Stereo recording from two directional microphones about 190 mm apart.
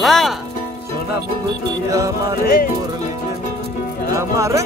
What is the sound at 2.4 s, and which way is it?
Speech, 50° left (ahead or behind).